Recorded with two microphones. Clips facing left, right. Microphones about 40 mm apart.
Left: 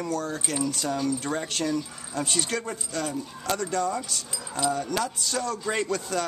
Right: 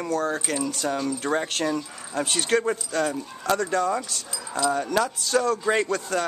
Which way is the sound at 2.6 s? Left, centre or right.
Right.